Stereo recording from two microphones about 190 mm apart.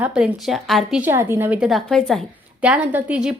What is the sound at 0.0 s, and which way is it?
A woman's voice, 5° right (ahead or behind).